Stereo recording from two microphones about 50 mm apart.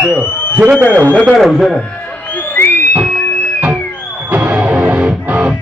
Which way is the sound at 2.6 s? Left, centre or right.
Left.